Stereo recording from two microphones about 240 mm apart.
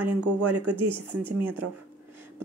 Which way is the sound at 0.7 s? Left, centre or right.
Centre.